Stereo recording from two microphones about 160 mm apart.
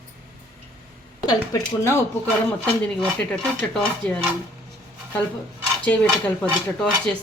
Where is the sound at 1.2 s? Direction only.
20° left (ahead or behind).